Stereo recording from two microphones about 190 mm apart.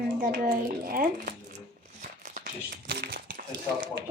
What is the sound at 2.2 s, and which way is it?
Crumpling, 55° right (ahead or behind).